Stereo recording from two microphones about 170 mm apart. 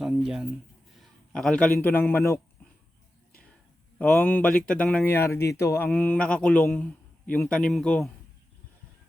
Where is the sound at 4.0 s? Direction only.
10° left (ahead or behind).